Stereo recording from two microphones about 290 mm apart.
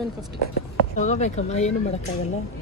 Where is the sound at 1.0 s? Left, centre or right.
Left.